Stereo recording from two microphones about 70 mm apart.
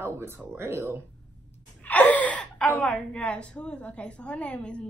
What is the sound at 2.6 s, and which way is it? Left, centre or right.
A woman's voice, centre.